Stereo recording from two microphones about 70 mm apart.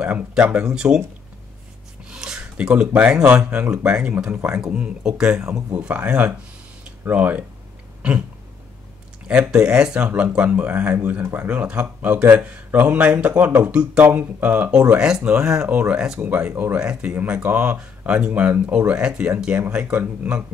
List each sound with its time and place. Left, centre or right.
0.0 s speech: centre
2.0 s a sound: centre
3.7 s speech: centre
9.3 s speech: centre
15.0 s speech: centre
15.7 s speech: centre
17.1 s speech: right